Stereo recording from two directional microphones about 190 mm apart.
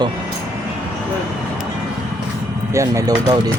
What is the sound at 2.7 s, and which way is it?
Speech, 15° right (ahead or behind).